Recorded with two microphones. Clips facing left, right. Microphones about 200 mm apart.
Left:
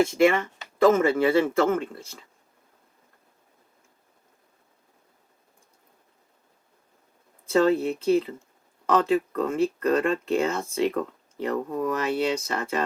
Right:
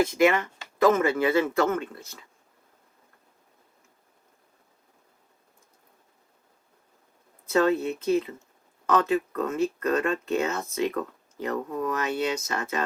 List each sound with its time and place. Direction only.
0.0 s speech: 30° left (ahead or behind)
7.4 s speech: 30° left (ahead or behind)